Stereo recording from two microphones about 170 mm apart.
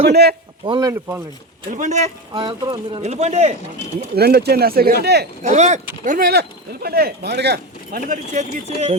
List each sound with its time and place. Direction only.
0.1 s speech: 70° right (ahead or behind)
0.6 s speech: 25° right (ahead or behind)
1.7 s speech: 45° right (ahead or behind)
2.3 s speech: 30° right (ahead or behind)
4.1 s speech: 65° right (ahead or behind)
5.4 s speech: 45° right (ahead or behind)
6.1 s speech: 60° right (ahead or behind); by 8.0 s 75° right (ahead or behind)
8.0 s speech: 50° right (ahead or behind)